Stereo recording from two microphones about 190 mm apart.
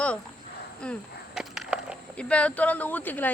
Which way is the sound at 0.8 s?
5° left (ahead or behind).